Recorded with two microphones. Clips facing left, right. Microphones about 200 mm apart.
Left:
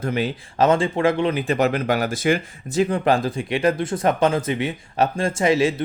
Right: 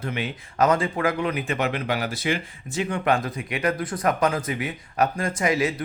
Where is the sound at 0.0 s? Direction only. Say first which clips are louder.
Left 6 dB; 35° left (ahead or behind).